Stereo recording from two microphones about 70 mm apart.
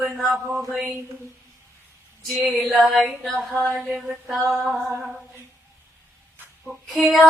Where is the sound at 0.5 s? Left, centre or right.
Centre.